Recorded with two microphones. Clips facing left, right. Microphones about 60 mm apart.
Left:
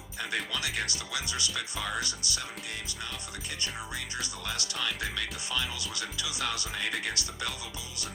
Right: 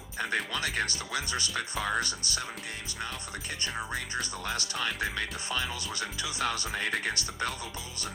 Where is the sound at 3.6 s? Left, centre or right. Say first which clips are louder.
Right 3 dB; right.